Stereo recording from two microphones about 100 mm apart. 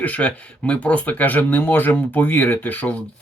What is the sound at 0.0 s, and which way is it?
Speech, 15° left (ahead or behind).